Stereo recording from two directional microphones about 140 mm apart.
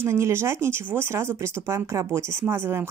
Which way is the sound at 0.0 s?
20° right (ahead or behind).